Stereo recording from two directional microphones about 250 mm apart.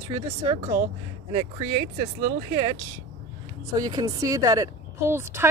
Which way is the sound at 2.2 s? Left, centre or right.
Centre.